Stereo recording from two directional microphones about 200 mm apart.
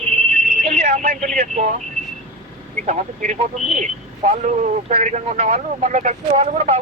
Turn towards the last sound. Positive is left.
turn(degrees=-35)  # may be behind; listen again after turning